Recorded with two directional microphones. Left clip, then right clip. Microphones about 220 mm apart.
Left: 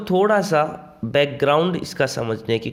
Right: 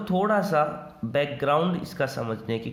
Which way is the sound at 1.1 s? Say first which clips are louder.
Left 6 dB; 35° left (ahead or behind).